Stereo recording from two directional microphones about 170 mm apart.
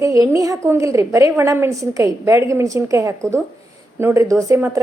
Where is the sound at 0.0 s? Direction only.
20° right (ahead or behind).